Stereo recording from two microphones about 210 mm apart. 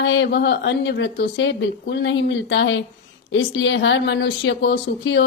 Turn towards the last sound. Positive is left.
turn(degrees=55)  # may be behind; listen again after turning